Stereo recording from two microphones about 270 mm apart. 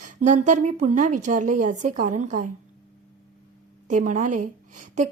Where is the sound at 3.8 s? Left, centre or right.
Right.